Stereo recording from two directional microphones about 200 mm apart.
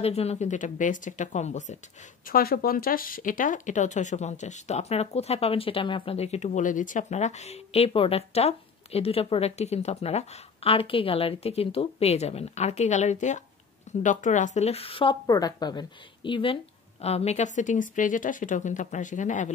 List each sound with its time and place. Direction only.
0.0 s speech: 30° left (ahead or behind)
2.2 s speech: 45° left (ahead or behind)